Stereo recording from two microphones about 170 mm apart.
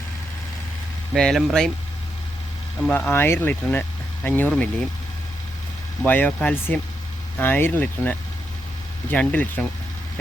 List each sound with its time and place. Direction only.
1.1 s speech: centre (ahead or behind)
2.9 s speech: 10° left (ahead or behind)
6.1 s speech: 10° left (ahead or behind)